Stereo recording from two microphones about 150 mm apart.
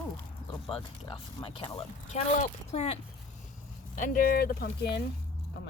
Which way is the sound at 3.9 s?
65° left (ahead or behind).